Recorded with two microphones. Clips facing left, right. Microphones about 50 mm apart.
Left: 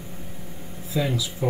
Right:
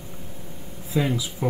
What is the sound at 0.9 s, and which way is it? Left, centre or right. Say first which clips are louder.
Speech: right 1 dB; right.